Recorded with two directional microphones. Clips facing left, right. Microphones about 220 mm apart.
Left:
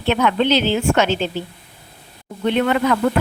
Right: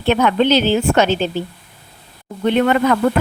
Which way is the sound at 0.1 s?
45° right (ahead or behind).